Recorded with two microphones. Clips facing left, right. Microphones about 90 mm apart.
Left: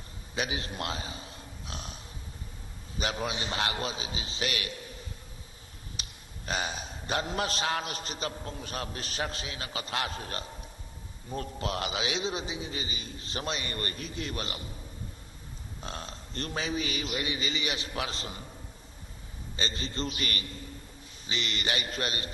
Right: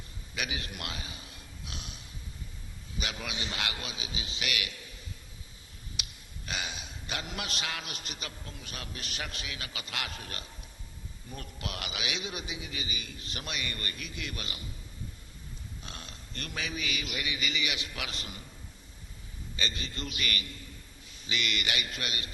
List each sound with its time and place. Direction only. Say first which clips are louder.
0.3 s a sound: left 4 dB; 30° left (ahead or behind)
3.0 s a man's voice: left 6 dB; 35° left (ahead or behind)
6.0 s a man's voice: even; 35° left (ahead or behind)
15.8 s a man's voice: left 10 dB; 35° left (ahead or behind)
19.5 s a man's voice: left 3 dB; 35° left (ahead or behind)